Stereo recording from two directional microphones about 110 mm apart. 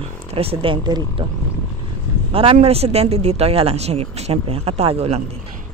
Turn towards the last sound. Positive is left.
turn(degrees=-65)  # may be behind; listen again after turning